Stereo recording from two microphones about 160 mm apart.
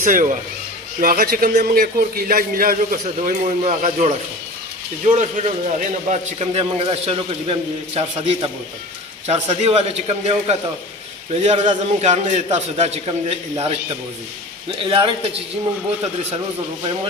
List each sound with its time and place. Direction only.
0.0 s a man's voice: 50° right (ahead or behind)
1.0 s a man's voice: 65° right (ahead or behind)
3.2 s a man's voice: 45° right (ahead or behind)
5.1 s a man's voice: 45° right (ahead or behind)